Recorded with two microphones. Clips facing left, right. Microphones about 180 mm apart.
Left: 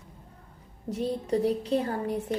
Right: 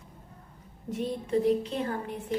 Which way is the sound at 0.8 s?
35° left (ahead or behind).